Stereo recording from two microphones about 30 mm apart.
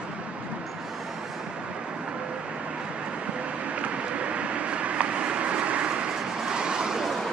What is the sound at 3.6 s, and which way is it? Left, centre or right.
Vehicle, right.